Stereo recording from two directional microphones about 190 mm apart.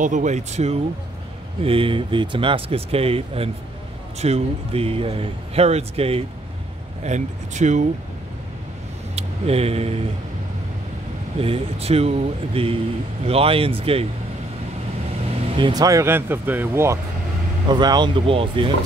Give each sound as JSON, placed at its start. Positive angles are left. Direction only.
{"t": 0.0, "sound": "speech", "side_deg": -40}
{"t": 9.1, "sound": "speech", "side_deg": -30}
{"t": 11.3, "sound": "speech", "side_deg": -30}
{"t": 15.5, "sound": "speech", "side_deg": -25}